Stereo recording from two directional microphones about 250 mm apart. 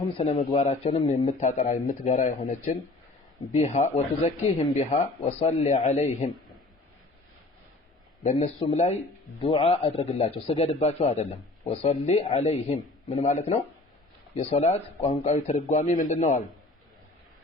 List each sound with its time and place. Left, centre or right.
0.2 s a man's voice: left
8.2 s a man's voice: left